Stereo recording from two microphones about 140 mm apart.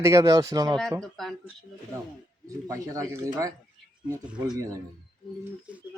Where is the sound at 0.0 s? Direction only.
20° right (ahead or behind).